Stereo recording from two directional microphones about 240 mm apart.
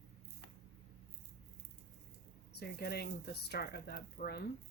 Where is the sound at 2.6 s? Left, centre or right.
Left.